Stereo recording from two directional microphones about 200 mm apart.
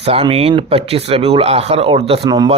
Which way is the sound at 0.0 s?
30° right (ahead or behind).